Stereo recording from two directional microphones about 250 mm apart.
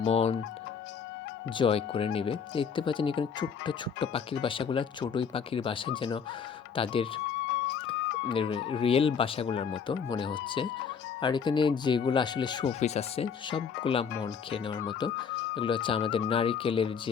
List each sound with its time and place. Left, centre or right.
0.0 s speech: left
1.5 s speech: left
8.3 s speech: left